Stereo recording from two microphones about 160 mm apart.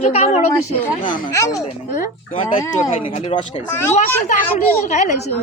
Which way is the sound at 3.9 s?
50° left (ahead or behind).